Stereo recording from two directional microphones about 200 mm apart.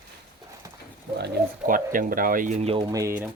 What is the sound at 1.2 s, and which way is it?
Speech, 50° right (ahead or behind).